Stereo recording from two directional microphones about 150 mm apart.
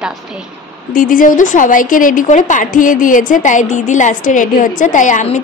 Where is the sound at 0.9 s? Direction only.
65° left (ahead or behind).